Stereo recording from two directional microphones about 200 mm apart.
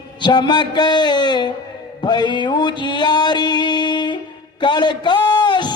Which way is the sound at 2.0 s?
20° left (ahead or behind).